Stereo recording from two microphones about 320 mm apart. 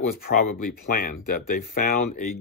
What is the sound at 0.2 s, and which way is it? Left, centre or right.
Speech, left.